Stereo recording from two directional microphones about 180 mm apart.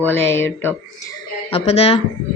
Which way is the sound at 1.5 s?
35° left (ahead or behind).